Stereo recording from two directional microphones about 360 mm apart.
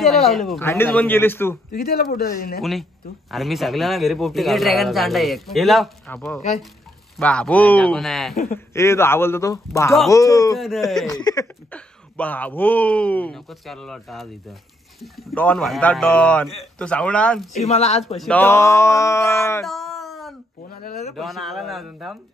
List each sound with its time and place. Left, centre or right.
0.0 s speech: centre
1.7 s speech: left
2.6 s speech: centre
17.6 s speech: centre
18.1 s speech: centre